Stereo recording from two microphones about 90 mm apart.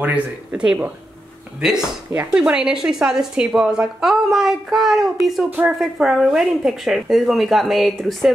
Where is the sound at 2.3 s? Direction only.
10° right (ahead or behind).